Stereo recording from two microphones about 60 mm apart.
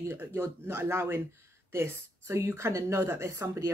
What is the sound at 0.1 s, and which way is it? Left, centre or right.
A woman's voice, right.